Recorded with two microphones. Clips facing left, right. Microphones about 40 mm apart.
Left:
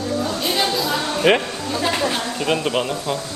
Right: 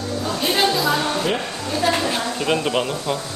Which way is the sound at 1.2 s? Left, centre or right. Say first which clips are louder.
Left 12 dB; left.